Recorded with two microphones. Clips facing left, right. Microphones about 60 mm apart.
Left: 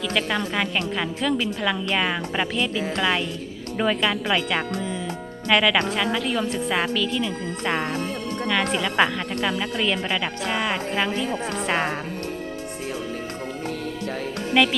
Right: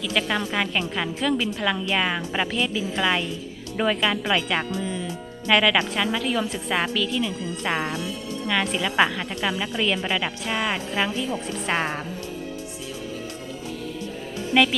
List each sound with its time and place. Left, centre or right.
0.0 s a woman's voice: centre
11.3 s a woman's voice: left
11.6 s a woman's voice: centre
14.5 s a woman's voice: centre